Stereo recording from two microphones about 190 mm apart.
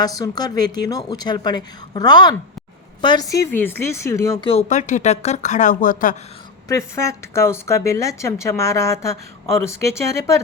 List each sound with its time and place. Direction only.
0.0 s a woman's voice: 20° left (ahead or behind)
4.4 s speech: 35° left (ahead or behind)
6.7 s speech: 15° left (ahead or behind)